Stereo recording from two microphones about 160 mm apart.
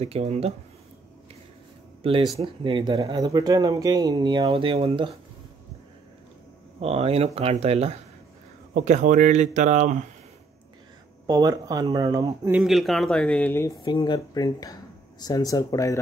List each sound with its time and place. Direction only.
0.0 s speech: 40° right (ahead or behind)
2.4 s speech: 30° right (ahead or behind)
3.0 s speech: 20° right (ahead or behind)
6.8 s speech: 40° right (ahead or behind)
11.2 s speech: 25° right (ahead or behind)
12.4 s speech: 5° right (ahead or behind); by 13.7 s 15° left (ahead or behind)
13.8 s speech: 30° left (ahead or behind)